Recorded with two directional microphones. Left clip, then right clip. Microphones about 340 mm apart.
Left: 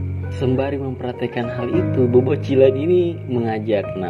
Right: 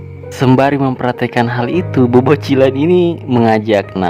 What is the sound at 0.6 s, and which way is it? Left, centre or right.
Speech, centre.